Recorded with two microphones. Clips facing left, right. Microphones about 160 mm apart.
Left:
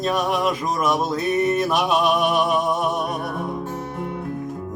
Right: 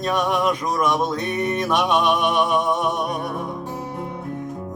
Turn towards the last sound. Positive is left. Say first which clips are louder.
# even
turn(degrees=5)  # may be behind; listen again after turning